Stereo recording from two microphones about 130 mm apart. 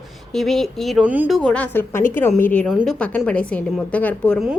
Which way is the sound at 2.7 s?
5° right (ahead or behind).